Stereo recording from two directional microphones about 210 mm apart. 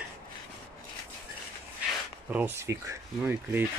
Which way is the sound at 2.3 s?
10° right (ahead or behind).